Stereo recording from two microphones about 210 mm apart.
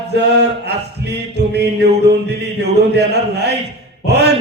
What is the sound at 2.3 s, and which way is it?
A man's voice, 50° right (ahead or behind).